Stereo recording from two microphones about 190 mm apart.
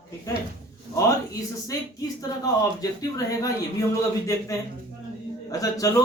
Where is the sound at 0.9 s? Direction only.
15° left (ahead or behind).